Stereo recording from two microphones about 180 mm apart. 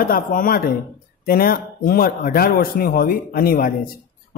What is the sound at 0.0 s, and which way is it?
Speech, 50° left (ahead or behind).